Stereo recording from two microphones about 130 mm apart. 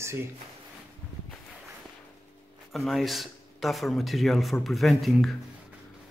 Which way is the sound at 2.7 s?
Centre (ahead or behind).